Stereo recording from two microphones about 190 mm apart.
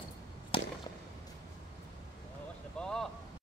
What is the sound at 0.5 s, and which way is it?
Whip, 30° left (ahead or behind).